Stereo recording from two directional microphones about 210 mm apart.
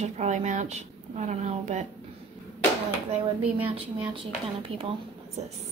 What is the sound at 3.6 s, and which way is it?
Speech, 25° right (ahead or behind).